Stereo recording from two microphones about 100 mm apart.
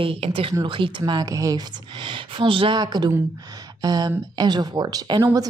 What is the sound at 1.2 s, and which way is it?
A woman's voice, 35° right (ahead or behind).